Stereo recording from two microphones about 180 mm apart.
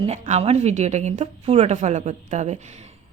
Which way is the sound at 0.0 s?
35° right (ahead or behind).